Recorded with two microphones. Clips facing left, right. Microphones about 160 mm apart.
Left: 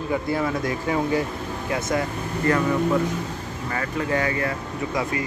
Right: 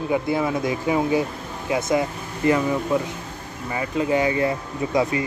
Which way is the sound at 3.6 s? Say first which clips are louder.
Right 3 dB; 15° right (ahead or behind).